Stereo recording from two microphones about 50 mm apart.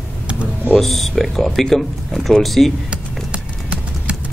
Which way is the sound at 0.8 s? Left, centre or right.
Centre.